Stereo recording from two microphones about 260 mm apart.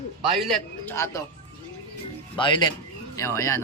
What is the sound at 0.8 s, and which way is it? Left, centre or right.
Speech, centre.